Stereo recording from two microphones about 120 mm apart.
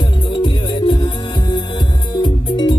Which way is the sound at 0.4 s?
40° left (ahead or behind).